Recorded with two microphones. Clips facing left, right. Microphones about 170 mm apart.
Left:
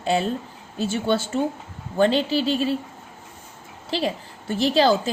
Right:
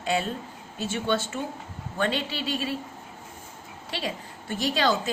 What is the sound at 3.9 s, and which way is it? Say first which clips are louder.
A woman's voice: left 7 dB; 30° left (ahead or behind).